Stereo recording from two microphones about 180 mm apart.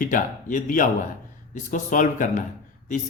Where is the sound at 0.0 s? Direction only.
45° left (ahead or behind).